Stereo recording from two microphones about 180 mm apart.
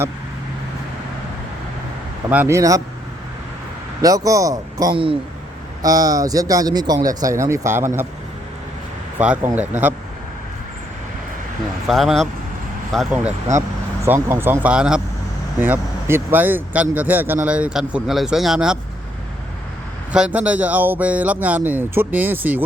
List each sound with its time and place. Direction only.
2.3 s speech: 15° right (ahead or behind)
4.0 s speech: 20° right (ahead or behind)
9.1 s speech: 10° right (ahead or behind)
11.9 s speech: centre (ahead or behind)
13.6 s speech: 15° right (ahead or behind)
20.1 s speech: 5° right (ahead or behind)